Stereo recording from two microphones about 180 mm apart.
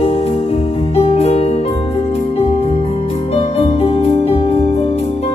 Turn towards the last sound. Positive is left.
turn(degrees=35)  # may be behind; listen again after turning